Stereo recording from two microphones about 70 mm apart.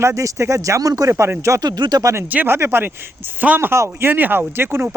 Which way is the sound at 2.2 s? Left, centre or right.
Right.